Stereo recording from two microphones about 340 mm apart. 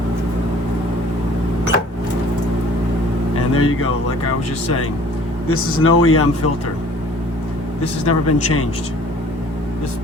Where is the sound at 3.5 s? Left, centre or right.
Left.